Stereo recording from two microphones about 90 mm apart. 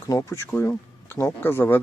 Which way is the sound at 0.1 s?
35° left (ahead or behind).